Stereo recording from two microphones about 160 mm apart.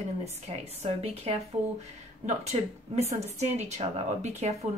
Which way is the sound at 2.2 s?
45° right (ahead or behind).